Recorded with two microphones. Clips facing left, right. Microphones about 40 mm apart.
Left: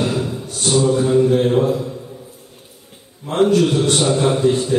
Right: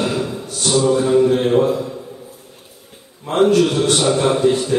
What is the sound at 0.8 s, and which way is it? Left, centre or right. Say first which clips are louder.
Mantra: right 2 dB; centre.